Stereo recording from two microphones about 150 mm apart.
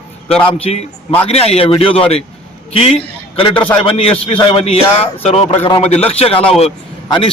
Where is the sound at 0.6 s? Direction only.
45° left (ahead or behind).